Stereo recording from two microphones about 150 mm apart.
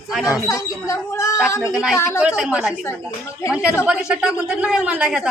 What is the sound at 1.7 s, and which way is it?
A man's voice, 5° right (ahead or behind).